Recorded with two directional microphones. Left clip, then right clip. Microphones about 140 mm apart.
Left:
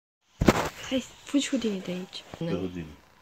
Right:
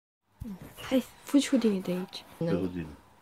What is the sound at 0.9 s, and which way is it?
Speech, 40° right (ahead or behind).